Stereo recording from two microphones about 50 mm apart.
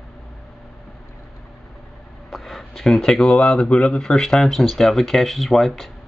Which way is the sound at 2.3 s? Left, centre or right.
Centre.